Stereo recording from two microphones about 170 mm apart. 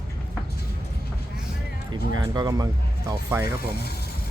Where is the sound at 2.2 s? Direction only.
25° right (ahead or behind).